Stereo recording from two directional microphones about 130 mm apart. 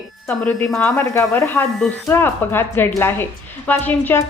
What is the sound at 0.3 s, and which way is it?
Speech, 5° left (ahead or behind).